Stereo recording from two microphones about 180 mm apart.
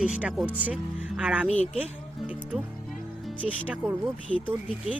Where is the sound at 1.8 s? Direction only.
10° right (ahead or behind).